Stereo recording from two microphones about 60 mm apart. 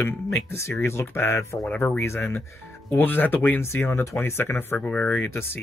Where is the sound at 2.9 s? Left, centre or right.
Left.